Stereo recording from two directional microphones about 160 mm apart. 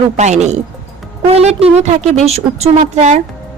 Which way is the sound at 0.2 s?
45° right (ahead or behind).